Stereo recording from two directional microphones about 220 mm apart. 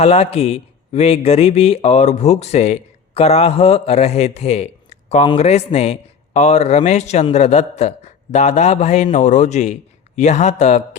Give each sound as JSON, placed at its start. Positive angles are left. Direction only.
{"t": 0.0, "sound": "a man's voice", "side_deg": 30}